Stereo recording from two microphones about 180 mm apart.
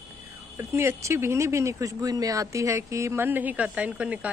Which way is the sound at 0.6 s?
15° right (ahead or behind).